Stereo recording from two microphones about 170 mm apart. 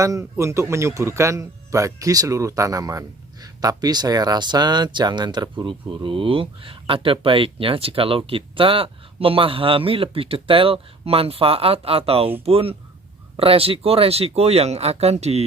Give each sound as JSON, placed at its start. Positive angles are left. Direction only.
{"t": 0.0, "sound": "a man's voice", "side_deg": -20}